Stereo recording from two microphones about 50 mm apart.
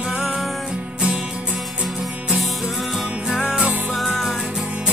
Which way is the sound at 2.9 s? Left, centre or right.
Centre.